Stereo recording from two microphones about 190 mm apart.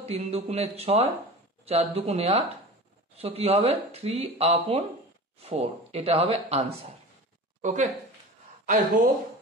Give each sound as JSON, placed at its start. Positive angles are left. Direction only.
{"t": 0.0, "sound": "speech", "side_deg": -30}